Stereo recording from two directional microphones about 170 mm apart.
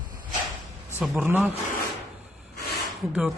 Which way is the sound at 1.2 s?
10° right (ahead or behind).